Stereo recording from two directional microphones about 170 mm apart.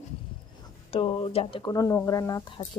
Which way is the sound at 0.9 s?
30° left (ahead or behind).